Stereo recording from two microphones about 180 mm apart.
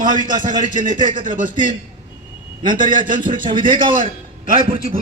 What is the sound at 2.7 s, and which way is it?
Speech, 45° right (ahead or behind).